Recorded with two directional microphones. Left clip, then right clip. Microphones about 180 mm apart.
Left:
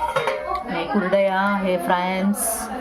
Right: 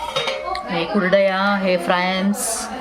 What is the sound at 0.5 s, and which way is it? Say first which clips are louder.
Speech: right 2 dB; 5° right (ahead or behind).